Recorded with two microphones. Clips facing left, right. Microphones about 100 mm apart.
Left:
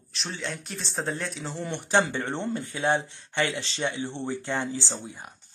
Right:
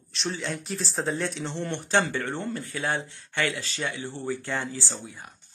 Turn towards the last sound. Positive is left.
turn(degrees=20)  # may be behind; listen again after turning